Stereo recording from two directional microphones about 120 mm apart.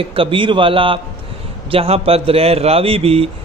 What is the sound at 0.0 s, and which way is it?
A man's voice, 50° right (ahead or behind).